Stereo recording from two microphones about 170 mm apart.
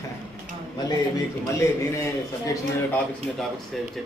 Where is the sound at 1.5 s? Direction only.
20° left (ahead or behind).